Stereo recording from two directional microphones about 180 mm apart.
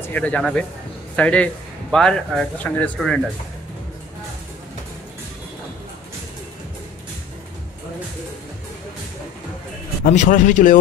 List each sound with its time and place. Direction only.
0.1 s speech: 5° left (ahead or behind)
10.1 s a man's voice: 45° left (ahead or behind)